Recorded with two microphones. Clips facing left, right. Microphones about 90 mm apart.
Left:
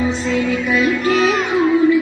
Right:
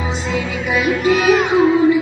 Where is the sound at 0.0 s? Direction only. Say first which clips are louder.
Left 3 dB; 20° right (ahead or behind).